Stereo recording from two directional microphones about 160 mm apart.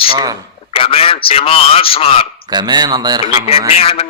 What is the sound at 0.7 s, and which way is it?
A man's voice, 35° left (ahead or behind).